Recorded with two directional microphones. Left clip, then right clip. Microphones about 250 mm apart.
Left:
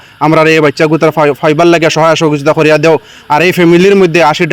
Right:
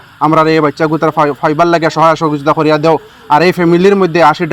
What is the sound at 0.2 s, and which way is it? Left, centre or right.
A man's voice, left.